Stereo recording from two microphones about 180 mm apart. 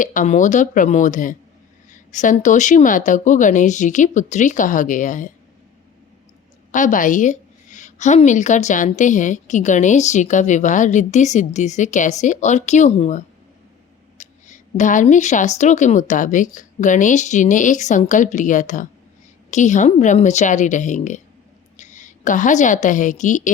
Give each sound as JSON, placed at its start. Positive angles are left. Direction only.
{"t": 0.0, "sound": "a woman's voice", "side_deg": 45}
{"t": 6.7, "sound": "a woman's voice", "side_deg": 45}